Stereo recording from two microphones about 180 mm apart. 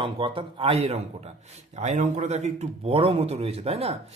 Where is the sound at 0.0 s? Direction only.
30° right (ahead or behind).